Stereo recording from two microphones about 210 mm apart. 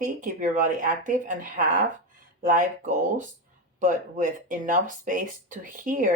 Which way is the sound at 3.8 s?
40° right (ahead or behind).